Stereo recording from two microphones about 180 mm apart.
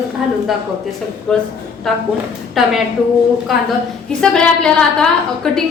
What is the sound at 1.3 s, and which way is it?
Speech, 5° left (ahead or behind).